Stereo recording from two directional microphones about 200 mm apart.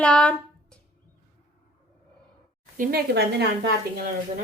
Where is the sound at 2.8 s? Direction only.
50° right (ahead or behind).